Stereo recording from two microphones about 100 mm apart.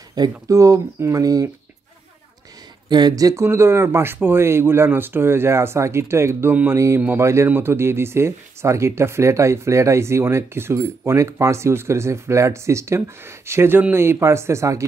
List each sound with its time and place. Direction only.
0.1 s speech: 40° right (ahead or behind)
2.9 s speech: 40° right (ahead or behind)
3.4 s speech: 25° right (ahead or behind)